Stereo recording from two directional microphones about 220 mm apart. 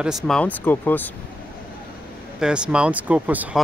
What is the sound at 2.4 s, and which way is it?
Speech, 5° right (ahead or behind).